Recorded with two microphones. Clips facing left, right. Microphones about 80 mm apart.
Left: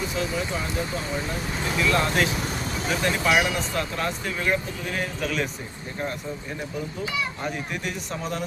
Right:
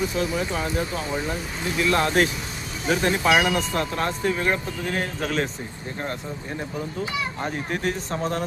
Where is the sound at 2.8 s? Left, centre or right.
Right.